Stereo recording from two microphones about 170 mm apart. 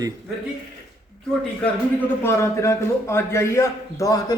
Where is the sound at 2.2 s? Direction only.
15° left (ahead or behind).